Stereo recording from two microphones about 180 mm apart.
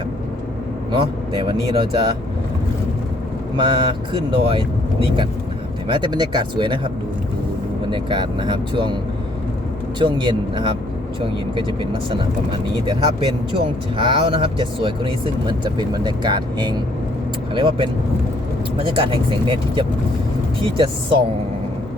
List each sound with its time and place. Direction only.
0.9 s speech: 25° right (ahead or behind)
3.6 s speech: 25° right (ahead or behind)
7.9 s speech: 25° right (ahead or behind)
10.0 s speech: 25° right (ahead or behind)
12.8 s speech: 25° right (ahead or behind)